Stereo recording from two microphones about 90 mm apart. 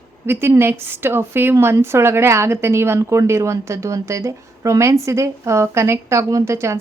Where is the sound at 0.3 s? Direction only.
30° right (ahead or behind).